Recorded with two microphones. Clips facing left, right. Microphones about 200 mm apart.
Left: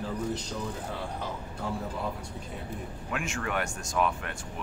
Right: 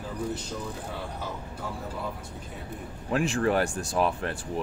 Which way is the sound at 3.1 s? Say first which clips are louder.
Right 9 dB; 35° right (ahead or behind).